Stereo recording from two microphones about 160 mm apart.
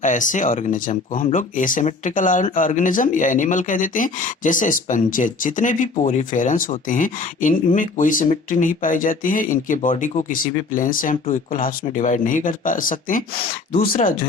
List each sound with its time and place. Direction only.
0.0 s speech: 50° left (ahead or behind)